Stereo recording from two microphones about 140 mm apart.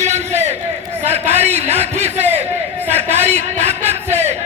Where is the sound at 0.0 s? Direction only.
55° right (ahead or behind).